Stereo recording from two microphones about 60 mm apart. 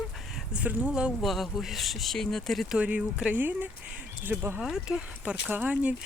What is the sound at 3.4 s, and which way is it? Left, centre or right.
Speech, right.